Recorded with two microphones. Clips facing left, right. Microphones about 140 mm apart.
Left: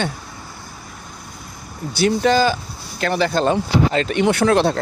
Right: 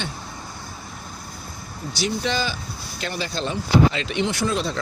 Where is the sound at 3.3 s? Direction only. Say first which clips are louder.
Left 4 dB; 50° left (ahead or behind); by 4.7 s 65° left (ahead or behind).